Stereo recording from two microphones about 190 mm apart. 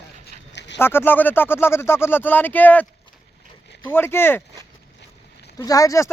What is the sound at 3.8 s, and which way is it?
Speech, 10° left (ahead or behind).